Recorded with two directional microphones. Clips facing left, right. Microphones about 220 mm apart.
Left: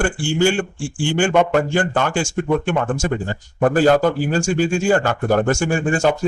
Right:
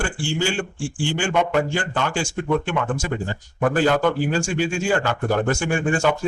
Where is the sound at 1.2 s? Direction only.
50° left (ahead or behind).